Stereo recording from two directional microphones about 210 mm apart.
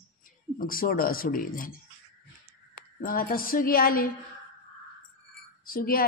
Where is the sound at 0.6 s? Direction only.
45° left (ahead or behind).